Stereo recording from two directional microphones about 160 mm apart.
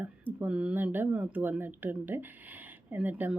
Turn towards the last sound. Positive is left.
turn(degrees=-10)  # may be behind; listen again after turning